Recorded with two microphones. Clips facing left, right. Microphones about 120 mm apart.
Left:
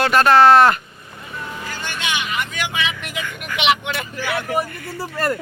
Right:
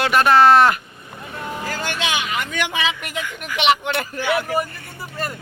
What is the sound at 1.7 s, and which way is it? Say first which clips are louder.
Vehicle: right 4 dB; 85° right.